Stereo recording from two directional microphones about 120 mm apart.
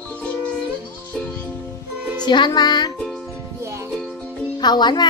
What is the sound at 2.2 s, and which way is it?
Music, 40° left (ahead or behind).